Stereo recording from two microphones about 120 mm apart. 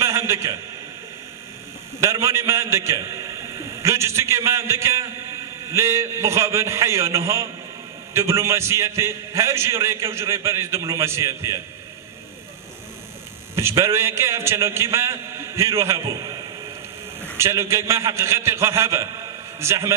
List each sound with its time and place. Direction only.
0.0 s a sound: 25° right (ahead or behind)
2.0 s a man's voice: 25° right (ahead or behind)
13.6 s a man's voice: 25° right (ahead or behind)
17.4 s a man's voice: 25° right (ahead or behind)